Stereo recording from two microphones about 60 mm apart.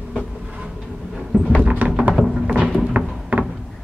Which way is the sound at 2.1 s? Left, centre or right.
Centre.